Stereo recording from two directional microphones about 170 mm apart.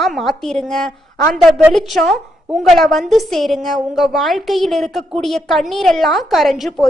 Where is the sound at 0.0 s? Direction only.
Centre (ahead or behind).